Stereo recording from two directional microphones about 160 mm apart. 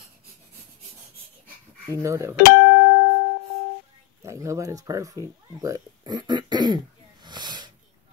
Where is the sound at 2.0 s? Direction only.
15° right (ahead or behind).